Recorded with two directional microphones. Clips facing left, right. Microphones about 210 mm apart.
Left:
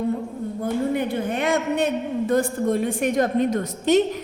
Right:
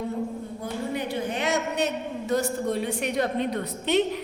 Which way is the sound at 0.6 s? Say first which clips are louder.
Left 8 dB; 50° left (ahead or behind).